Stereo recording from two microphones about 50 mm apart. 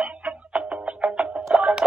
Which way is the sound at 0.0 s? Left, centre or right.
Right.